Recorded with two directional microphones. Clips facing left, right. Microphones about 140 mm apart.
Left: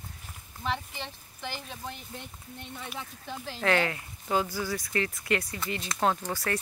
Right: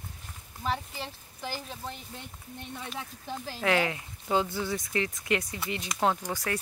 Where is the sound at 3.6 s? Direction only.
10° right (ahead or behind).